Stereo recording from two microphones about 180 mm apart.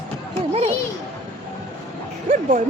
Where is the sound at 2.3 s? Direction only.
50° right (ahead or behind).